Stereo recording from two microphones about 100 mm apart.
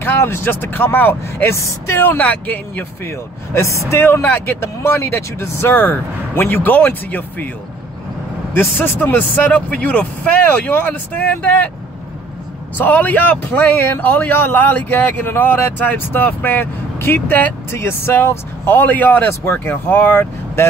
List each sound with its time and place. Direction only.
0.0 s speech: 25° left (ahead or behind)
3.1 s speech: 30° left (ahead or behind)
8.5 s speech: 20° left (ahead or behind)
12.7 s speech: 15° left (ahead or behind)